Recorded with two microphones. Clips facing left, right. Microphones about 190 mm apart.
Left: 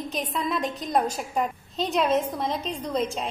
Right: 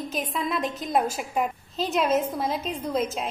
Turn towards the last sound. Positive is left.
turn(degrees=0)  # may be behind; listen again after turning